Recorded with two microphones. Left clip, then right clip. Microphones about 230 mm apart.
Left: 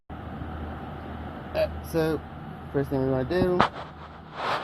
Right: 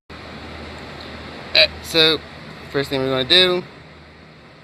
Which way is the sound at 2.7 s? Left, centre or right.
Right.